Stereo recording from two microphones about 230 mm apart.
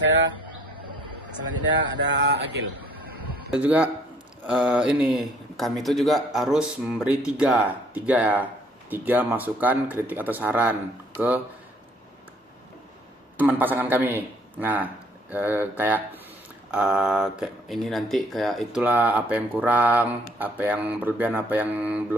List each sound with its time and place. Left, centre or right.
1.9 s a sound: right
3.5 s speech: centre
13.3 s speech: centre